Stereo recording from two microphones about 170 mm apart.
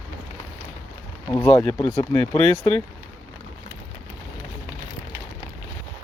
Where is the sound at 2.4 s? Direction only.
35° right (ahead or behind).